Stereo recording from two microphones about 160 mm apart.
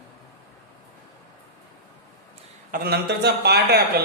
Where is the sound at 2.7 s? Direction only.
75° right (ahead or behind).